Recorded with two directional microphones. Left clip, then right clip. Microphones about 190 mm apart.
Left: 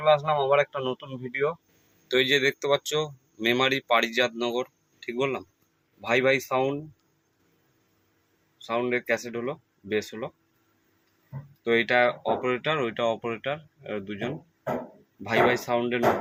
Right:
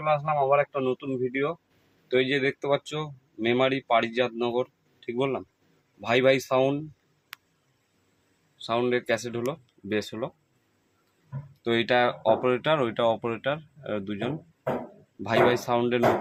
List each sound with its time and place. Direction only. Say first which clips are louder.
0.0 s speech: left 2 dB; 5° right (ahead or behind)
2.0 s speech: left 2 dB; 10° right (ahead or behind)
8.6 s speech: right 1 dB; 25° right (ahead or behind)
11.6 s speech: left 1 dB; 20° right (ahead or behind)